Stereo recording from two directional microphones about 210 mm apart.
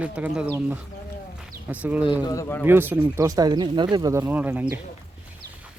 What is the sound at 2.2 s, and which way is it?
Speech, 15° left (ahead or behind).